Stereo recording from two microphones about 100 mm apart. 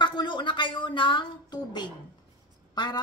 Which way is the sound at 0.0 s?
50° left (ahead or behind).